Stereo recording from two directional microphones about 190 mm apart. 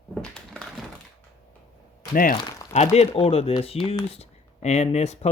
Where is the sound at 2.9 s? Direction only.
30° left (ahead or behind).